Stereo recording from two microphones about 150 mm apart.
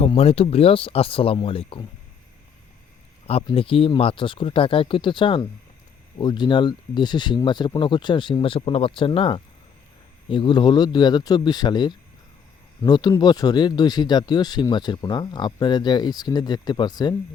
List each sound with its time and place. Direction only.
0.0 s speech: 40° left (ahead or behind)
3.5 s speech: 35° left (ahead or behind)